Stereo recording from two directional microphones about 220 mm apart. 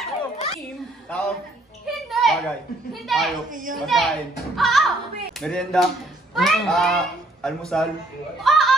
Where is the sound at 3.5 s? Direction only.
35° right (ahead or behind).